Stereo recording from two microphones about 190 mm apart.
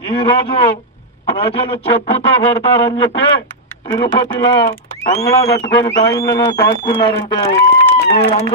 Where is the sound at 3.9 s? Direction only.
25° left (ahead or behind).